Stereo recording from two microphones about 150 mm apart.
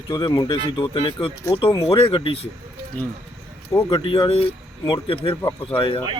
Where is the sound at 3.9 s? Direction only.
35° left (ahead or behind).